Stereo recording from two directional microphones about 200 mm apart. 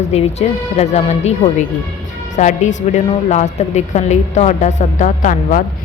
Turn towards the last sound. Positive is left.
turn(degrees=40)  # may be behind; listen again after turning